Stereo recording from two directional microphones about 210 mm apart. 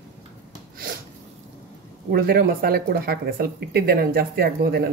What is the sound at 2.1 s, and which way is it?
Speech, 45° right (ahead or behind).